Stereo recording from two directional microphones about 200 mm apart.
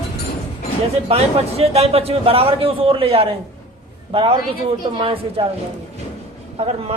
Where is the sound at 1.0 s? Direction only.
30° right (ahead or behind).